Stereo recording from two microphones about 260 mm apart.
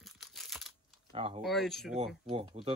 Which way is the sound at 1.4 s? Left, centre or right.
Centre.